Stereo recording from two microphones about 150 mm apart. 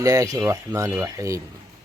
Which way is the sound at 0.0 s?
25° right (ahead or behind).